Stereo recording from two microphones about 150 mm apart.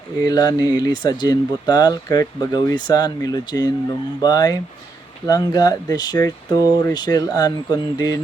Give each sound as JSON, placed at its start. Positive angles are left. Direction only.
{"t": 0.3, "sound": "speech", "side_deg": 25}